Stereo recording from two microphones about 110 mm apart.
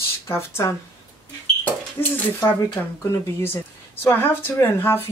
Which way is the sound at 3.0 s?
25° left (ahead or behind).